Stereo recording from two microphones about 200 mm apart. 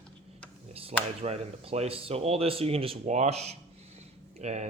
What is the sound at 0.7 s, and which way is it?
Speech, 30° right (ahead or behind).